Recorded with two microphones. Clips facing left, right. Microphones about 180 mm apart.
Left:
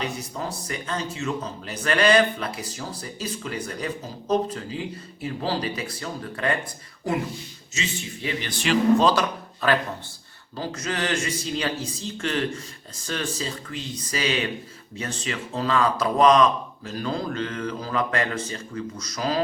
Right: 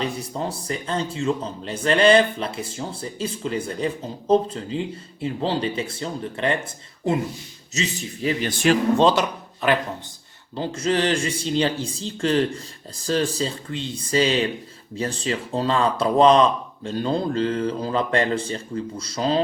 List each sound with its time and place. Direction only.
0.0 s speech: 30° right (ahead or behind)
7.7 s speech: 40° right (ahead or behind)
9.0 s speech: 20° right (ahead or behind)